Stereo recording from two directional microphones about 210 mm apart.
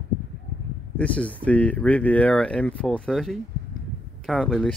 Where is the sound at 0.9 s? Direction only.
5° left (ahead or behind).